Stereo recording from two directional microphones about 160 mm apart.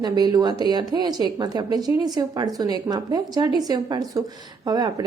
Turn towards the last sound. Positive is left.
turn(degrees=-25)  # may be behind; listen again after turning